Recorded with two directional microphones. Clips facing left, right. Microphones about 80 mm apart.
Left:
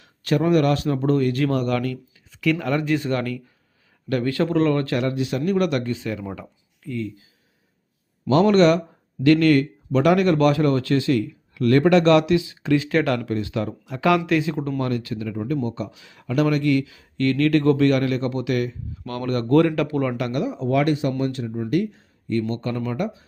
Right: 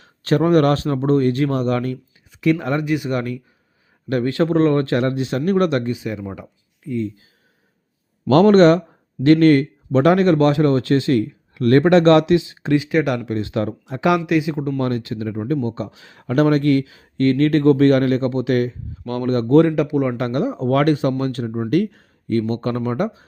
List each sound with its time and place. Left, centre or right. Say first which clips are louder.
0.0 s a man's voice: right 3 dB; right
2.8 s speech: right 1 dB; centre
5.9 s speech: right 2 dB; centre
8.3 s speech: right 4 dB; right
12.8 s speech: right 2 dB; centre
14.3 s speech: right 3 dB; centre
14.8 s speech: right 3 dB; right
20.1 s speech: right 4 dB; right